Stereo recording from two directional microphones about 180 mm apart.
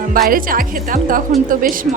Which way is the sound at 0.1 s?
50° right (ahead or behind).